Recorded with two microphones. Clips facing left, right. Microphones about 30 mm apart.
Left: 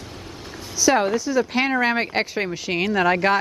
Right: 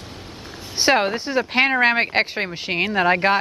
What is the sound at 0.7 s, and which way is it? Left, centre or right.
Speech, right.